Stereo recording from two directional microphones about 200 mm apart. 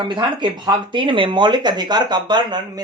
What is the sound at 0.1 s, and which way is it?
Speech, 25° right (ahead or behind).